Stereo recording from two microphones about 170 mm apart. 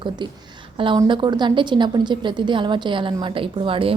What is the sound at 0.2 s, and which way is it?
A woman's voice, 25° right (ahead or behind).